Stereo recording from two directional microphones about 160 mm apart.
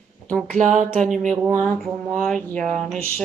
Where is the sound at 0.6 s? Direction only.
50° right (ahead or behind).